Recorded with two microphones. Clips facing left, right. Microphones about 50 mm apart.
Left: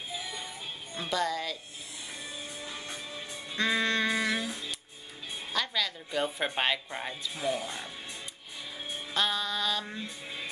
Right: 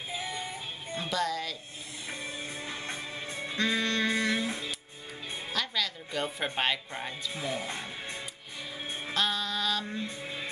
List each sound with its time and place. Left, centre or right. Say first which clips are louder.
0.9 s music: even; centre
2.6 s music: right 3 dB; right
3.5 s music: left 1 dB; centre
5.5 s speech: left 1 dB; centre
9.1 s music: even; centre